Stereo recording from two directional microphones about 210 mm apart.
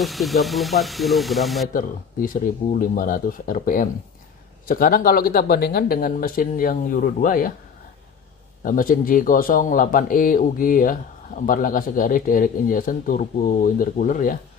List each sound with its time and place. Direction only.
0.0 s speech: centre (ahead or behind)
1.7 s speech: 40° left (ahead or behind)
8.6 s speech: 40° left (ahead or behind)